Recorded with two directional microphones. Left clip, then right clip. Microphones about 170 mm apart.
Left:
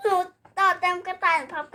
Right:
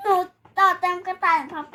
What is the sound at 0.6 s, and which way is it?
A child's voice, 20° left (ahead or behind).